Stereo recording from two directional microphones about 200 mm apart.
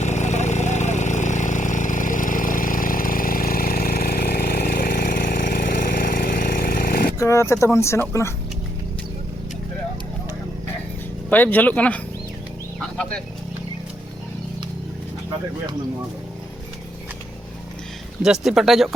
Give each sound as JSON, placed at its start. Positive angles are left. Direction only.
{"t": 0.0, "sound": "vehicle", "side_deg": 35}
{"t": 7.2, "sound": "speech", "side_deg": 15}
{"t": 11.3, "sound": "speech", "side_deg": 10}
{"t": 18.2, "sound": "speech", "side_deg": 0}